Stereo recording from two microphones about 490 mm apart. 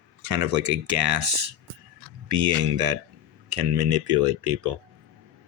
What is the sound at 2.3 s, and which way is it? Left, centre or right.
Speech, right.